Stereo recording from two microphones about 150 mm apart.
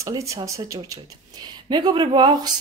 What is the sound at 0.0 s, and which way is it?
Speech, 20° right (ahead or behind).